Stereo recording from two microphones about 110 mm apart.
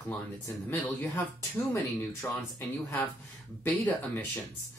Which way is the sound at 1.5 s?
25° left (ahead or behind).